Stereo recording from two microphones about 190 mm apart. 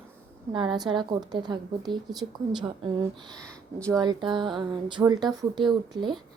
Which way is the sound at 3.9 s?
20° right (ahead or behind).